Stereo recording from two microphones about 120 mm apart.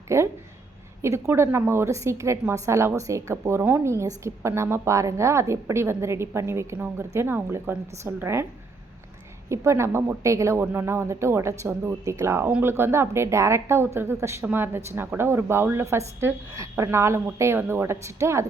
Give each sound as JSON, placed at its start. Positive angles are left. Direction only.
{"t": 0.1, "sound": "a woman's voice", "side_deg": -25}
{"t": 9.5, "sound": "a woman's voice", "side_deg": -25}